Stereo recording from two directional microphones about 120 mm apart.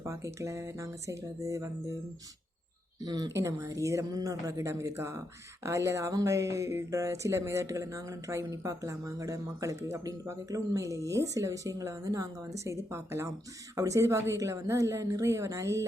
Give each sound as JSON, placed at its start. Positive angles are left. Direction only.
{"t": 0.0, "sound": "speech", "side_deg": -25}
{"t": 3.0, "sound": "speech", "side_deg": -30}